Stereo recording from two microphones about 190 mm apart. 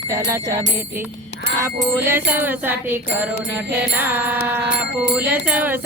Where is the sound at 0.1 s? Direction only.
15° right (ahead or behind).